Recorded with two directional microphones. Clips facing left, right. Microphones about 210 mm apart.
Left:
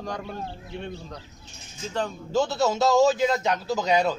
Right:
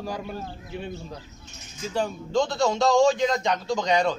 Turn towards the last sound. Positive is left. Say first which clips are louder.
# even
turn(degrees=5)  # may be behind; listen again after turning